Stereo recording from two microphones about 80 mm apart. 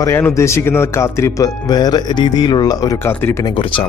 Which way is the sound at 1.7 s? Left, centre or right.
Left.